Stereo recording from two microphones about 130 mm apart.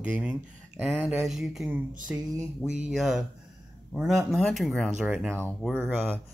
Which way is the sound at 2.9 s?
5° right (ahead or behind).